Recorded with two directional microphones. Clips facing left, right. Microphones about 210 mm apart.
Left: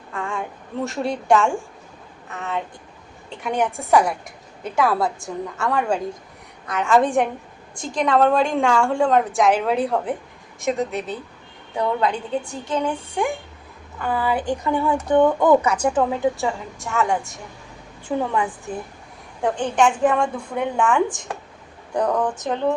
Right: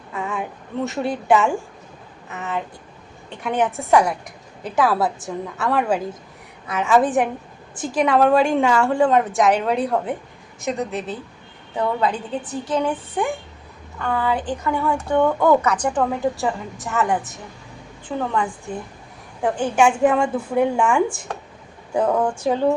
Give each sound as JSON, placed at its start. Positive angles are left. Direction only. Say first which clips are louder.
{"t": 0.1, "sound": "a sound", "louder": "right 1 dB", "side_deg": -5}
{"t": 0.9, "sound": "a woman's voice", "louder": "even", "side_deg": 0}
{"t": 14.0, "sound": "speech", "louder": "even", "side_deg": 5}
{"t": 18.1, "sound": "speech", "louder": "left 2 dB", "side_deg": 10}
{"t": 19.4, "sound": "a woman's voice", "louder": "right 1 dB", "side_deg": -5}